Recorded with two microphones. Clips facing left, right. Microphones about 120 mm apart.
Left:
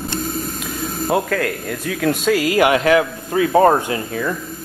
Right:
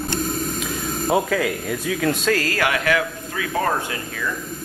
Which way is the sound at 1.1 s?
5° right (ahead or behind).